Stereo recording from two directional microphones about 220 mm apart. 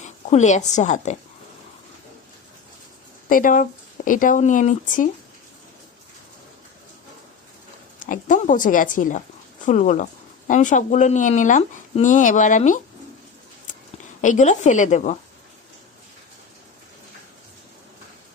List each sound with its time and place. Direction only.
0.0 s a woman's voice: 30° left (ahead or behind)
3.2 s a woman's voice: 35° left (ahead or behind)
7.9 s a woman's voice: 35° left (ahead or behind)
13.7 s a sound: 35° left (ahead or behind)
14.2 s a woman's voice: 35° left (ahead or behind)